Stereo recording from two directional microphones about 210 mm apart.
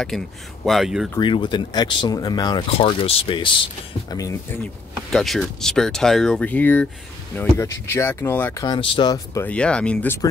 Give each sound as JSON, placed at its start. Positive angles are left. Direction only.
{"t": 0.7, "sound": "speech", "side_deg": 0}
{"t": 1.1, "sound": "speech", "side_deg": 20}
{"t": 5.1, "sound": "speech", "side_deg": 0}
{"t": 8.6, "sound": "speech", "side_deg": 25}